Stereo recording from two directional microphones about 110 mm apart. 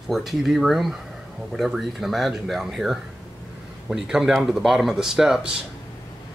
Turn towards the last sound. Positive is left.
turn(degrees=-5)  # may be behind; listen again after turning